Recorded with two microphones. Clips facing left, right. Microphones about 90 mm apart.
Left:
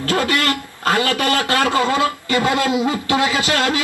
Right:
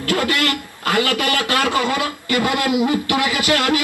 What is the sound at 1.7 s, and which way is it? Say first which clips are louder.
A man's voice: left 3 dB; 25° left (ahead or behind).